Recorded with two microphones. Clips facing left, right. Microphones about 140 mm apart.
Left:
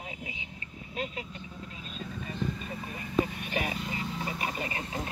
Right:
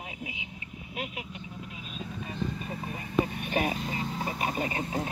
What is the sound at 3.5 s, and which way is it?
Speech, 35° right (ahead or behind).